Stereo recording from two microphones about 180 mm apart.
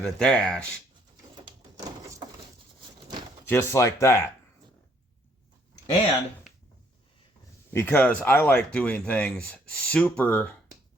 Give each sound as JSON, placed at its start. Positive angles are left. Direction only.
{"t": 0.0, "sound": "speech", "side_deg": 5}
{"t": 1.5, "sound": "a sound", "side_deg": -20}
{"t": 3.4, "sound": "speech", "side_deg": 10}
{"t": 7.7, "sound": "speech", "side_deg": 15}